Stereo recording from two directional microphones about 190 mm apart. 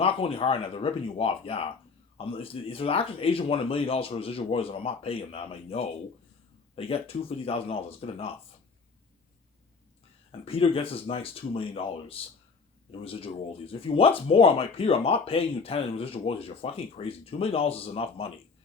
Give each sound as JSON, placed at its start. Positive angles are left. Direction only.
{"t": 0.0, "sound": "speech", "side_deg": 30}
{"t": 10.4, "sound": "speech", "side_deg": 30}